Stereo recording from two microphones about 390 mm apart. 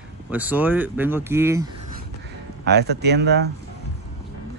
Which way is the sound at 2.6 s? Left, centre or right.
Right.